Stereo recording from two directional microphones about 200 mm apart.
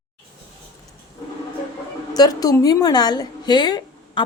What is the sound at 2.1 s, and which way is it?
A woman's voice, 20° left (ahead or behind).